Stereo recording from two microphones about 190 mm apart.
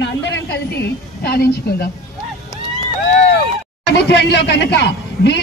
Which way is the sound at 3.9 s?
65° left (ahead or behind).